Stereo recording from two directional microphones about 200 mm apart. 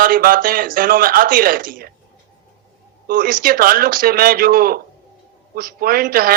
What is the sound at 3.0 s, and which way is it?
Speech, 45° right (ahead or behind).